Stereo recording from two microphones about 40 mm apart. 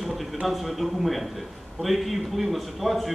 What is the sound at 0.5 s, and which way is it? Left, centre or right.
A man's voice, centre.